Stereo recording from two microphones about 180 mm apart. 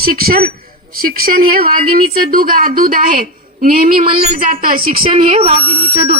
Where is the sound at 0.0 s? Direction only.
55° right (ahead or behind).